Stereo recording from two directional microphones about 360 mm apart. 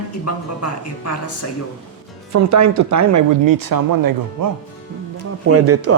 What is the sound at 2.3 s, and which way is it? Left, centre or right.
Speech, right.